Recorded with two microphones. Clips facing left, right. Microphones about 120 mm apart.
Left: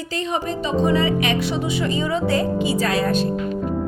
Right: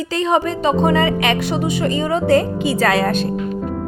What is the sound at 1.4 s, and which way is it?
A woman's voice, 50° right (ahead or behind).